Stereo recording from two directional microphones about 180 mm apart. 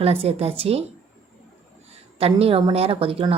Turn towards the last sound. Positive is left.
turn(degrees=-30)  # may be behind; listen again after turning